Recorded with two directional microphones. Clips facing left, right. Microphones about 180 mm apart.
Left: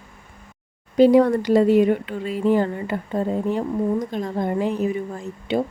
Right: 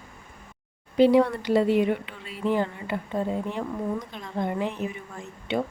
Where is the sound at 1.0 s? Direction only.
45° left (ahead or behind).